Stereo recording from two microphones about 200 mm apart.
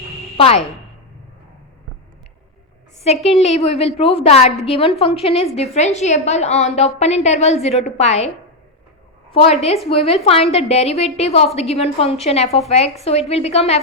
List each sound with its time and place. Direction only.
0.3 s speech: 30° left (ahead or behind)
3.2 s a woman's voice: 30° left (ahead or behind)
9.3 s a woman's voice: 30° left (ahead or behind)